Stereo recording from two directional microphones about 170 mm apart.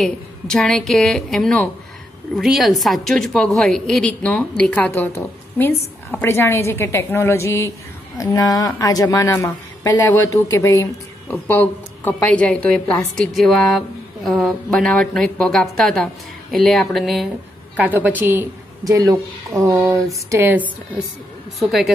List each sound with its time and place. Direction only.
0.0 s a woman's voice: 5° left (ahead or behind); by 20.6 s 15° right (ahead or behind)
21.5 s a woman's voice: centre (ahead or behind)